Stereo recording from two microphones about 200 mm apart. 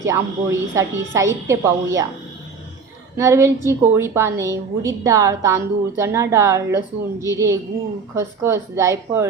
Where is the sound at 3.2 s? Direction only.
15° right (ahead or behind).